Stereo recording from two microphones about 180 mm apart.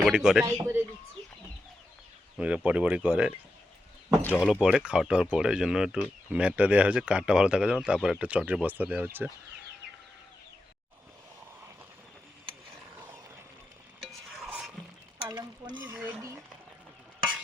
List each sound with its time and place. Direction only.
0.0 s speech: 5° right (ahead or behind)
0.4 s speech: 15° right (ahead or behind)
2.4 s speech: 5° right (ahead or behind)
4.2 s speech: 10° left (ahead or behind)
4.6 s speech: 5° right (ahead or behind)
14.0 s stir: centre (ahead or behind)
15.3 s a sound: 25° right (ahead or behind)
15.9 s a sound: 10° right (ahead or behind)